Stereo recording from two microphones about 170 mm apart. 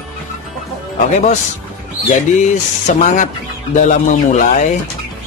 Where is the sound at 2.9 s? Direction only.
45° left (ahead or behind).